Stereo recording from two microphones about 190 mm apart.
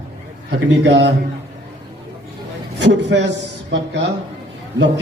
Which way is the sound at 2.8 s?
65° right (ahead or behind).